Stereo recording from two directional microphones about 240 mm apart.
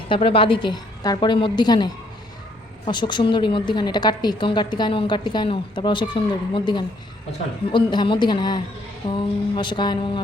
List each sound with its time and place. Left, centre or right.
0.1 s a woman's voice: left